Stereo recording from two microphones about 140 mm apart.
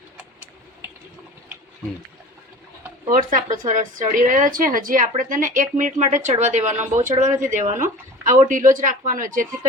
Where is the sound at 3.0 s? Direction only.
70° right (ahead or behind).